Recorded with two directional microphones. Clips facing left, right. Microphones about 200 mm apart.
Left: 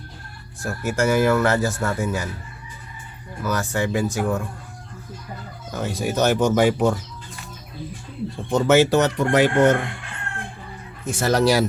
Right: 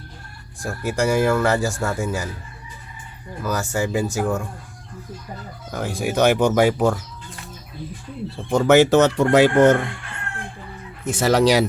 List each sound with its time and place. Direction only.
0.7 s speech: centre (ahead or behind)
3.4 s speech: centre (ahead or behind)
5.7 s speech: 10° right (ahead or behind)
8.4 s speech: 10° right (ahead or behind)
11.0 s speech: 20° right (ahead or behind)